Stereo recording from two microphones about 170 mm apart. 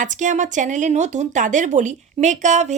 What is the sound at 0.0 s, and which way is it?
Speech, 45° right (ahead or behind).